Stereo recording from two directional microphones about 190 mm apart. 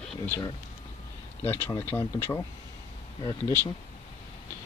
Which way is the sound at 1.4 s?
15° left (ahead or behind).